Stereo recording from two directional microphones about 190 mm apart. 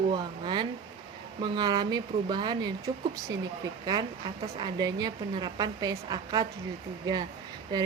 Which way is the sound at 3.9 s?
20° right (ahead or behind).